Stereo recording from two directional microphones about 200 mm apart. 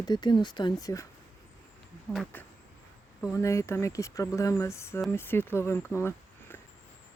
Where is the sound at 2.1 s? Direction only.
10° left (ahead or behind).